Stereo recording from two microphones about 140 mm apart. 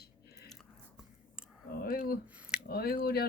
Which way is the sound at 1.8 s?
90° left.